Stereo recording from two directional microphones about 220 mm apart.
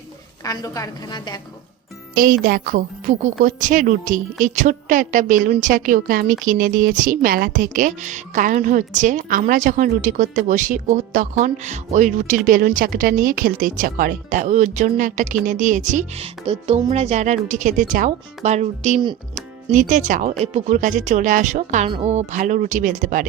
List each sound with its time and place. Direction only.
0.4 s a woman's voice: 15° left (ahead or behind)
2.1 s a woman's voice: 40° right (ahead or behind)